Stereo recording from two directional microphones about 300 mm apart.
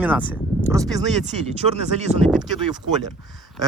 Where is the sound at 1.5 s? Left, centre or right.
Right.